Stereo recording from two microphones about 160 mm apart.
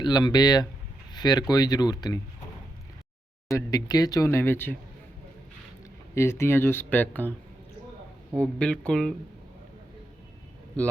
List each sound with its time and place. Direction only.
0.0 s speech: 25° left (ahead or behind)
3.5 s speech: 25° left (ahead or behind)
6.1 s speech: 15° left (ahead or behind)
8.4 s speech: 5° left (ahead or behind)
10.8 s speech: 10° left (ahead or behind)